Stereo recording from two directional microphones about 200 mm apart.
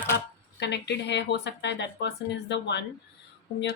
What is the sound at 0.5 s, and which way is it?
Speech, 60° left (ahead or behind).